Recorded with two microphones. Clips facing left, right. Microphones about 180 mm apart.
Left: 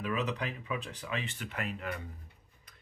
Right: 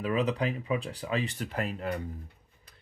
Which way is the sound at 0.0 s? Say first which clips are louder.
Right 6 dB; 35° right (ahead or behind).